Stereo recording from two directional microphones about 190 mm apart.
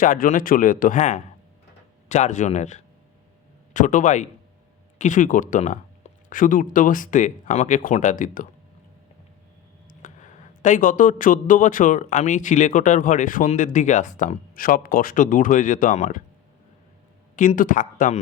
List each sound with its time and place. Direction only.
0.0 s a man's voice: 45° left (ahead or behind)
10.0 s a man's voice: 40° left (ahead or behind)
17.3 s a man's voice: 45° left (ahead or behind)